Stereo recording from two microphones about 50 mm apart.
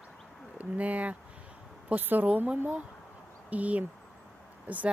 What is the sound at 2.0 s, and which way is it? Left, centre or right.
Speech, right.